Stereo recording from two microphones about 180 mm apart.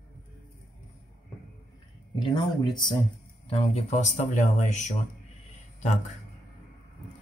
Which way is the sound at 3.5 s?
35° left (ahead or behind).